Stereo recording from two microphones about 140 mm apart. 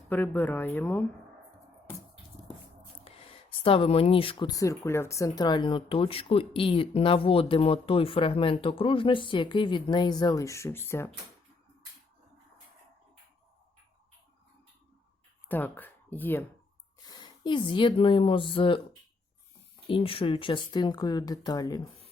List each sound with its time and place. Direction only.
0.1 s speech: 15° left (ahead or behind)
3.0 s speech: 40° left (ahead or behind); by 11.1 s 15° left (ahead or behind)
15.4 s speech: 15° left (ahead or behind)
17.1 s speech: 30° left (ahead or behind)
19.9 s speech: 40° left (ahead or behind)